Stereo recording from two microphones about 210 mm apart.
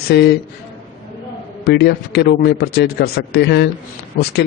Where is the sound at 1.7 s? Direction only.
50° left (ahead or behind).